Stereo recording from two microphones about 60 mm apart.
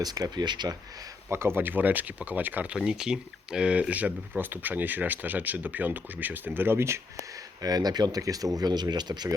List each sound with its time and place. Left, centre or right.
0.0 s speech: right
0.6 s speech: right
2.7 s speech: centre; by 7.0 s right
7.2 s speech: right
9.1 s speech: right